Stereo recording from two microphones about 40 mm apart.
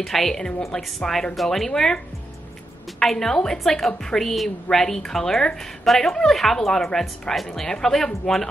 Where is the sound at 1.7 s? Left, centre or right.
Centre.